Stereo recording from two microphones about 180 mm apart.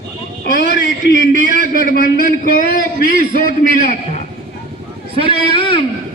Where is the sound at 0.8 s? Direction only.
50° right (ahead or behind).